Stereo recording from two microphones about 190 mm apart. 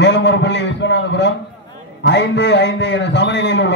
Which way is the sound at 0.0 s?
65° left (ahead or behind).